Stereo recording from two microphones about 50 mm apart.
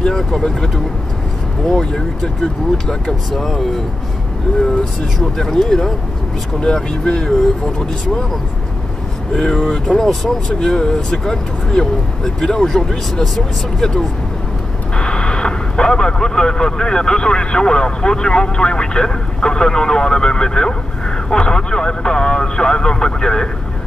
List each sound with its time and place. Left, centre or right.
0.0 s speech: centre
1.7 s speech: centre
5.2 s speech: centre
9.3 s speech: centre